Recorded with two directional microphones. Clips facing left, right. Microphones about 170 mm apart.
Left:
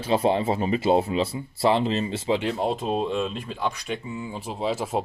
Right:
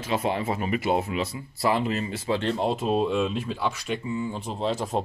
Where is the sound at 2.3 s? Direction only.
5° left (ahead or behind).